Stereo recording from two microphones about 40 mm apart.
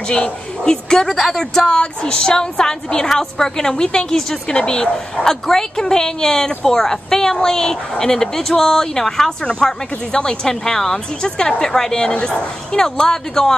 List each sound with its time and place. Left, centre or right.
0.1 s a woman's voice: centre
1.0 s a woman's voice: centre
12.1 s a woman's voice: left